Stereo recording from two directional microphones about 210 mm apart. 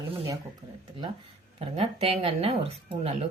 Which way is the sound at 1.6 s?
30° right (ahead or behind).